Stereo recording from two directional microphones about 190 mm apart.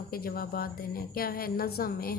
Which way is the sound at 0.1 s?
50° left (ahead or behind).